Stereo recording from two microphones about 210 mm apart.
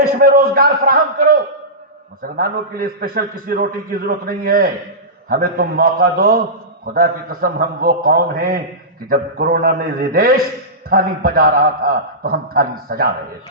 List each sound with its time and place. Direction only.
0.2 s a man's voice: 45° right (ahead or behind)